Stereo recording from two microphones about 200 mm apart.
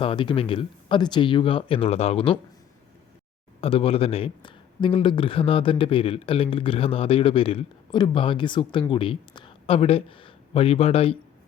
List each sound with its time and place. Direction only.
0.0 s speech: 25° left (ahead or behind)
3.6 s speech: 30° left (ahead or behind)